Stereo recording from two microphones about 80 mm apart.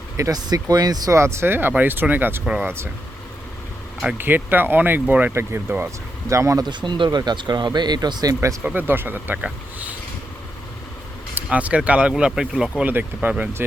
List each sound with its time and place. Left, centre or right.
0.2 s speech: right
1.1 s speech: right
4.2 s speech: right
6.2 s speech: right
6.6 s speech: right
7.2 s speech: right
8.6 s speech: right
11.4 s speech: centre
12.8 s speech: right